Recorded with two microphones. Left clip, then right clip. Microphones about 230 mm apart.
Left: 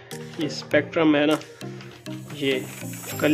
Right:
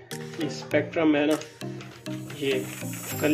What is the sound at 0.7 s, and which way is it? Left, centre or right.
Speech, left.